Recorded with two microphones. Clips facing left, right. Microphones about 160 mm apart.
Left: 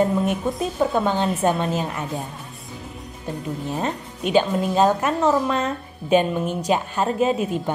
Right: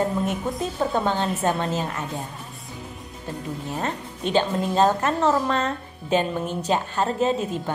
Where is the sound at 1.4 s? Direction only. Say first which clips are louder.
Left 2 dB; 15° left (ahead or behind).